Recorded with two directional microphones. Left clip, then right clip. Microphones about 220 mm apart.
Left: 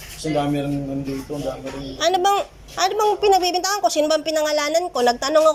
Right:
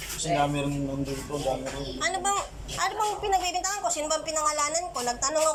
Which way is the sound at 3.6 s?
70° left (ahead or behind).